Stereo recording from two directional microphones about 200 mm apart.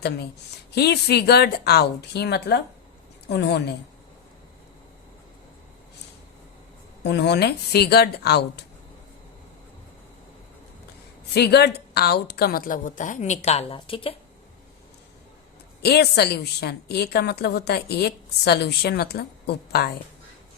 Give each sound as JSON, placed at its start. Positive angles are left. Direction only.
{"t": 0.7, "sound": "speech", "side_deg": 55}
{"t": 7.0, "sound": "a woman's voice", "side_deg": 55}
{"t": 11.3, "sound": "a woman's voice", "side_deg": 55}
{"t": 15.8, "sound": "a woman's voice", "side_deg": 55}